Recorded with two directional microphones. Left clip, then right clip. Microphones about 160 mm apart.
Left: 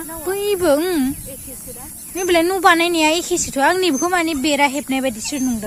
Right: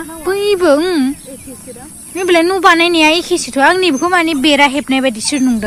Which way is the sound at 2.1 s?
5° left (ahead or behind).